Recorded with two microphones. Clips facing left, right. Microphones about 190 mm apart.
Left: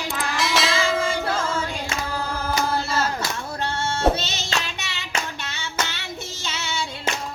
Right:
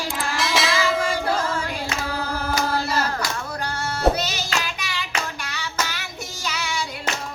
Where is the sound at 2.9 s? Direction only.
25° left (ahead or behind).